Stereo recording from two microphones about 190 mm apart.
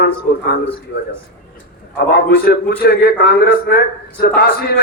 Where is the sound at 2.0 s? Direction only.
50° left (ahead or behind).